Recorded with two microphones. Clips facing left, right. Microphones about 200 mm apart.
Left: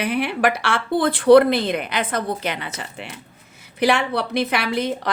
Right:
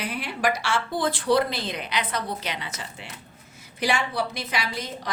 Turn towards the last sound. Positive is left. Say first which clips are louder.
# left 9 dB
turn(degrees=65)  # may be behind; listen again after turning